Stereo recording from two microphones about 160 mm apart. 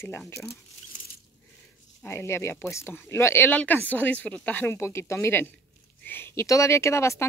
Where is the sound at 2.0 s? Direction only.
15° left (ahead or behind).